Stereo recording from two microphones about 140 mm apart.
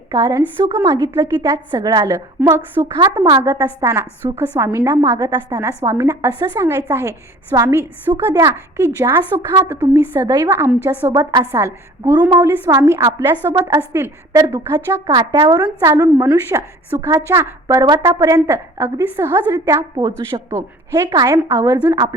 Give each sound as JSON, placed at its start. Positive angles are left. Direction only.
{"t": 0.1, "sound": "a woman's voice", "side_deg": -25}
{"t": 4.6, "sound": "a woman's voice", "side_deg": -20}
{"t": 17.8, "sound": "a woman's voice", "side_deg": -30}